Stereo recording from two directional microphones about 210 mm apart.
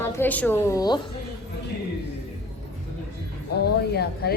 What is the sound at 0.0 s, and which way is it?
Speech, 10° left (ahead or behind).